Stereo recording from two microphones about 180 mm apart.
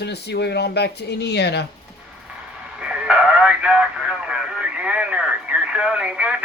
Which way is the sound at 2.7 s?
5° right (ahead or behind).